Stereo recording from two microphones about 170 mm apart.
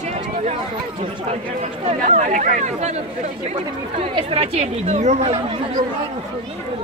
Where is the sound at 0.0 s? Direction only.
45° right (ahead or behind).